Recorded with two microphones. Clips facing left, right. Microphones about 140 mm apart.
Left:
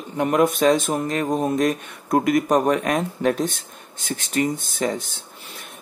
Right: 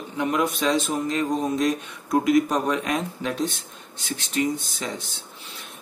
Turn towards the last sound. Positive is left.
turn(degrees=50)  # may be behind; listen again after turning